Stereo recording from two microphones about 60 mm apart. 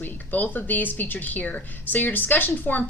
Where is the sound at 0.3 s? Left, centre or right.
Left.